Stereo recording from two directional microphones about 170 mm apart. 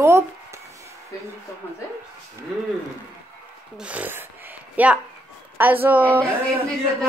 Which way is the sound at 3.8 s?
10° right (ahead or behind).